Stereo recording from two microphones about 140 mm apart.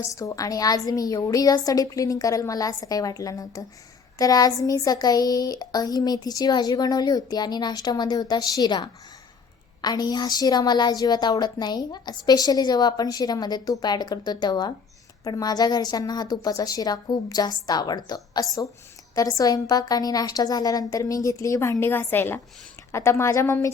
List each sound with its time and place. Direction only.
0.0 s a woman's voice: 20° left (ahead or behind)